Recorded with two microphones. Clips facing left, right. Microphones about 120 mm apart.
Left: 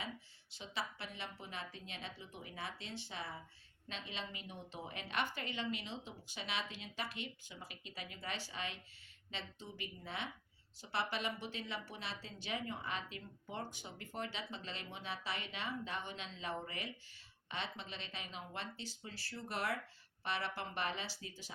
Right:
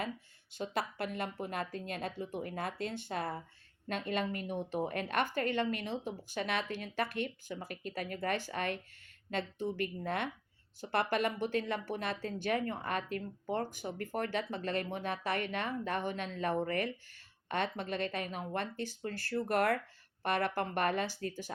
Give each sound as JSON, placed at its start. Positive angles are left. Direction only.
{"t": 0.5, "sound": "speech", "side_deg": -55}